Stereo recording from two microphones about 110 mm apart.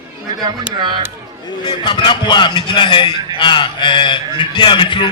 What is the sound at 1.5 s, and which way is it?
A man's voice, 45° left (ahead or behind).